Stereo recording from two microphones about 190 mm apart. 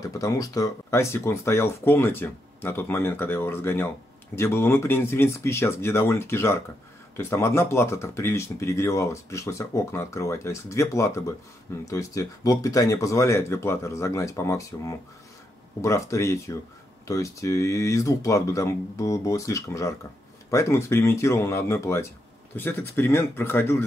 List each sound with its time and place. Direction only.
0.0 s speech: 20° left (ahead or behind)